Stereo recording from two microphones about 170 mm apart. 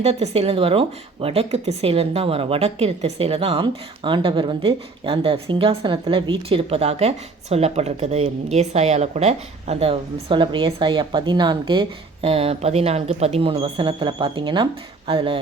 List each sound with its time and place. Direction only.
0.0 s a woman's voice: 40° right (ahead or behind)